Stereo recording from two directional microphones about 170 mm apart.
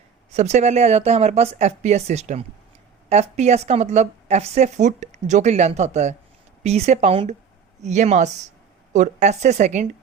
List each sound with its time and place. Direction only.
0.3 s a woman's voice: 40° right (ahead or behind)